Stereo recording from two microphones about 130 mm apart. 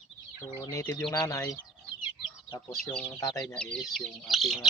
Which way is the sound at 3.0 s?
30° left (ahead or behind).